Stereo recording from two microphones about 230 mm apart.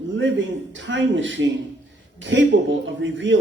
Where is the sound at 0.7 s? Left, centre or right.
Right.